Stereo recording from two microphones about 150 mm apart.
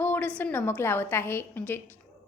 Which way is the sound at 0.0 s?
10° left (ahead or behind).